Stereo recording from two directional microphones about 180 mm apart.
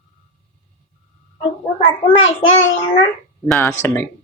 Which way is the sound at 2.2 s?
90° left.